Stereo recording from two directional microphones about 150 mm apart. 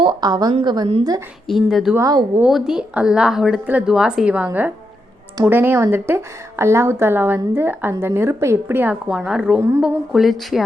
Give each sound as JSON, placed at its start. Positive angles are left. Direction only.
{"t": 0.0, "sound": "a woman's voice", "side_deg": -30}
{"t": 1.5, "sound": "a woman's voice", "side_deg": 0}
{"t": 2.0, "sound": "a woman's voice", "side_deg": -20}
{"t": 2.4, "sound": "a woman's voice", "side_deg": 0}
{"t": 9.6, "sound": "a woman's voice", "side_deg": -15}
{"t": 10.1, "sound": "a woman's voice", "side_deg": 0}